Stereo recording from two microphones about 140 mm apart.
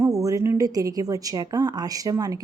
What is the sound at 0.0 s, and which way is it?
A woman's voice, 25° right (ahead or behind).